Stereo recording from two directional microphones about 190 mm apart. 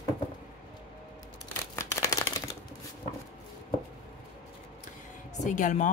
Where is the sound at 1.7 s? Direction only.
15° left (ahead or behind).